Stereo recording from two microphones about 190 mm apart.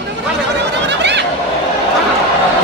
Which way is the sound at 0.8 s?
65° right (ahead or behind).